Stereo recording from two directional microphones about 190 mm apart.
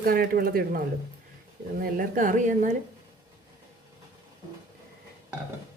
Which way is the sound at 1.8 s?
45° right (ahead or behind).